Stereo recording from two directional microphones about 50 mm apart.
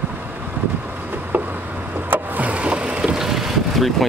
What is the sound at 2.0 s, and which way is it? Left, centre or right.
Vehicle, right.